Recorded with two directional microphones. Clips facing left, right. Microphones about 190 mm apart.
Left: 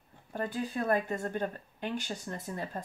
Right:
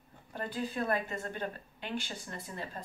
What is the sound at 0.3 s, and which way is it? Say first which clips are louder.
A woman's voice: left 3 dB; 45° left (ahead or behind).